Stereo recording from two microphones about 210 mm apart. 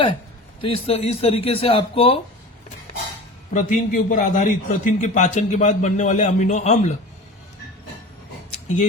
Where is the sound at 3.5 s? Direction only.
35° left (ahead or behind).